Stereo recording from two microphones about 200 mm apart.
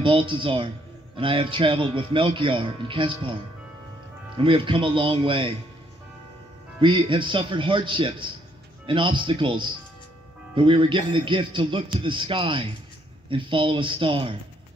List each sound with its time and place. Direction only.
0.0 s speech: 25° right (ahead or behind)
4.4 s speech: 25° right (ahead or behind)
6.8 s speech: 25° right (ahead or behind)